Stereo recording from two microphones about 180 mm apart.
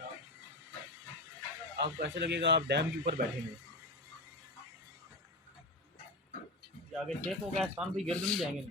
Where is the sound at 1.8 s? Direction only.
65° right (ahead or behind).